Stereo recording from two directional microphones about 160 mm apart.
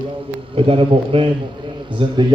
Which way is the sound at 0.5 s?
35° right (ahead or behind).